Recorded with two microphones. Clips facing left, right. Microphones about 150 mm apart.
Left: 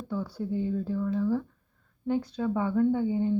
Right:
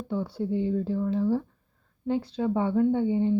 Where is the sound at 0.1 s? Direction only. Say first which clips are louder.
Right 3 dB; 25° right (ahead or behind).